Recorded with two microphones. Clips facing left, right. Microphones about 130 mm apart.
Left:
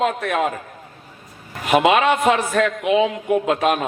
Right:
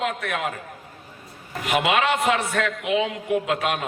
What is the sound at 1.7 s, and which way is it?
A man's voice, 25° left (ahead or behind).